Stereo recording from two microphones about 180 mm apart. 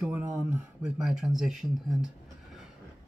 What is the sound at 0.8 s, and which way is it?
Speech, 5° right (ahead or behind).